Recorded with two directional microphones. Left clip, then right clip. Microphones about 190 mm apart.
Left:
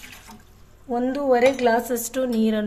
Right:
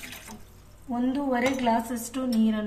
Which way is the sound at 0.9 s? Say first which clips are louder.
Left 7 dB; 60° left (ahead or behind).